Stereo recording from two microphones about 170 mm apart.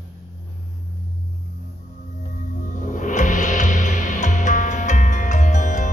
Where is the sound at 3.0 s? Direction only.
50° left (ahead or behind).